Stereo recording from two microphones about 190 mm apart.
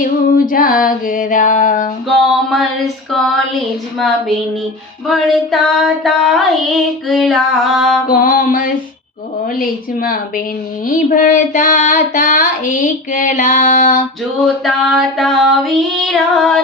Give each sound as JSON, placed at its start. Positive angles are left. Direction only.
{"t": 0.0, "sound": "music", "side_deg": 45}
{"t": 2.0, "sound": "music", "side_deg": 0}
{"t": 3.9, "sound": "female singing", "side_deg": 0}
{"t": 8.1, "sound": "child singing", "side_deg": 45}
{"t": 14.4, "sound": "female singing", "side_deg": 0}